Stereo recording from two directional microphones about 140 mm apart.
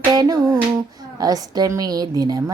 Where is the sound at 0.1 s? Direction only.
25° right (ahead or behind).